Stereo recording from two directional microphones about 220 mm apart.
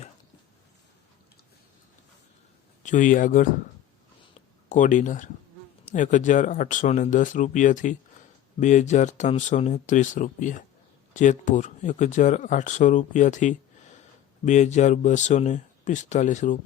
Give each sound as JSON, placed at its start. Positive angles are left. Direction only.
{"t": 2.8, "sound": "speech", "side_deg": 35}
{"t": 4.7, "sound": "speech", "side_deg": 35}